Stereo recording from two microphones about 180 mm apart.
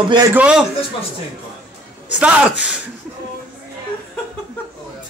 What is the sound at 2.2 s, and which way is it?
Speech, 5° right (ahead or behind).